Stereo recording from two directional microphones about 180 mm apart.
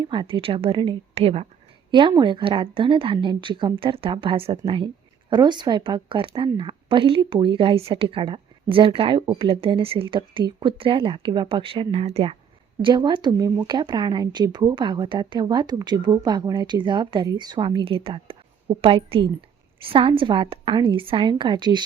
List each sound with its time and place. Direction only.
0.0 s a woman's voice: 25° right (ahead or behind)